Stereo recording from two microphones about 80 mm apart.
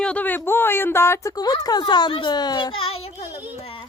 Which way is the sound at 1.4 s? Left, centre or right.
Left.